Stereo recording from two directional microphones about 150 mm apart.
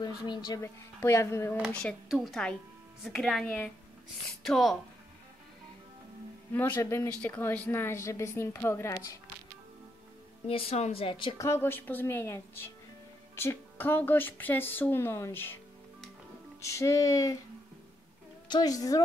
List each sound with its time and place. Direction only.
0.0 s music: 25° left (ahead or behind)
1.0 s a woman's voice: 20° left (ahead or behind)
1.7 s a woman's voice: 5° left (ahead or behind)
6.5 s a woman's voice: 15° left (ahead or behind)
10.4 s a woman's voice: 45° left (ahead or behind)
11.3 s a woman's voice: 20° left (ahead or behind)
13.4 s a woman's voice: 15° left (ahead or behind)
16.6 s music: 20° left (ahead or behind)
18.5 s music: 25° left (ahead or behind)